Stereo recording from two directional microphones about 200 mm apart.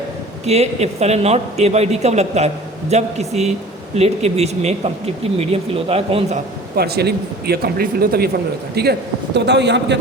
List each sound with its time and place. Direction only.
0.4 s speech: 30° right (ahead or behind)
6.7 s speech: 55° right (ahead or behind)